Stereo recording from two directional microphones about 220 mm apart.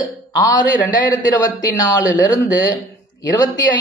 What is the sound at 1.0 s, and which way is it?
Speech, 15° left (ahead or behind).